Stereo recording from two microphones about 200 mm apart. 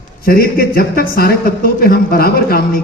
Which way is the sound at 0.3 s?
50° left (ahead or behind).